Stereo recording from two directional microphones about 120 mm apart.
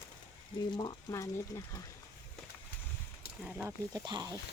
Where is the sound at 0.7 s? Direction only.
40° left (ahead or behind).